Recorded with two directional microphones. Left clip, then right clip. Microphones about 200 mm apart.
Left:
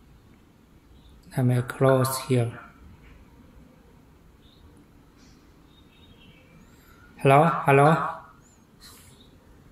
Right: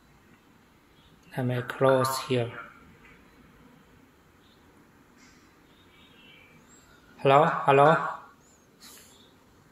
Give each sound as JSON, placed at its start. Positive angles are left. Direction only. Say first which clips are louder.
{"t": 1.3, "sound": "speech", "louder": "left 3 dB", "side_deg": 15}
{"t": 7.2, "sound": "speech", "louder": "left 2 dB", "side_deg": 15}